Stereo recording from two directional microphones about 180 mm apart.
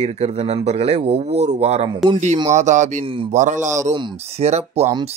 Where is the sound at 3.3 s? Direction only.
45° right (ahead or behind).